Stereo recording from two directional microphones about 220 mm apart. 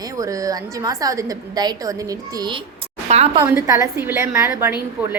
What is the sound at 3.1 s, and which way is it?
Speech, 30° right (ahead or behind).